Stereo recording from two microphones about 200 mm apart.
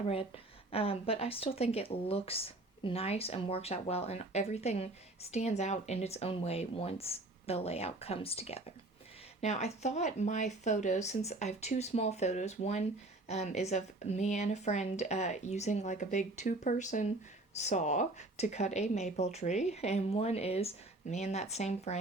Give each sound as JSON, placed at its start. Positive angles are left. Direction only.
{"t": 0.7, "sound": "speech", "side_deg": 30}